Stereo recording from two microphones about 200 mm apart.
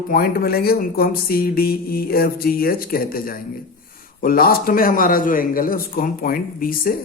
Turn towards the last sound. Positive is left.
turn(degrees=45)  # may be behind; listen again after turning